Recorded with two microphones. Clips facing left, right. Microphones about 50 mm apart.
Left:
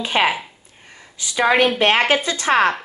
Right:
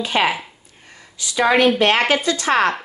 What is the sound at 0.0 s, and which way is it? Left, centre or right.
A woman's voice, centre.